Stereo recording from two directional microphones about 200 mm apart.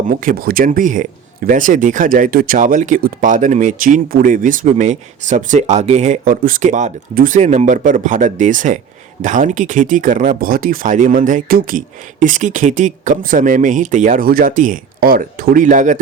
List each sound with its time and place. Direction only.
0.1 s speech: 45° right (ahead or behind)